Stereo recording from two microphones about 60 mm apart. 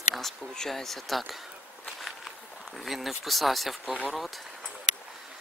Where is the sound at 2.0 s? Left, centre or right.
Centre.